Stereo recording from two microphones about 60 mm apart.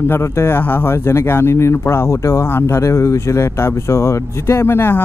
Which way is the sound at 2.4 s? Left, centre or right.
Left.